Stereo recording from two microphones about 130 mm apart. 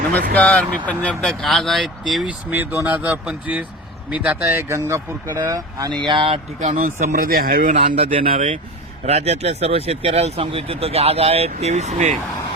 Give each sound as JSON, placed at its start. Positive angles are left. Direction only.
{"t": 0.3, "sound": "speech", "side_deg": 10}
{"t": 2.5, "sound": "speech", "side_deg": -15}
{"t": 6.6, "sound": "speech", "side_deg": -80}
{"t": 7.9, "sound": "speech", "side_deg": -45}
{"t": 8.2, "sound": "speech", "side_deg": -90}
{"t": 9.0, "sound": "speech", "side_deg": -55}